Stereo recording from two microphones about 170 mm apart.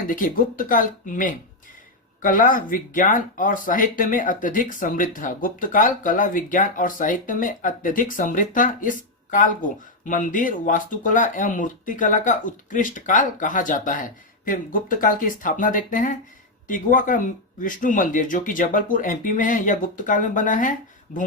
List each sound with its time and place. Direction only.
0.1 s speech: 55° left (ahead or behind)